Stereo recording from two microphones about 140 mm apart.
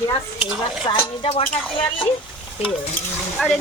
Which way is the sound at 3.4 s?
10° left (ahead or behind).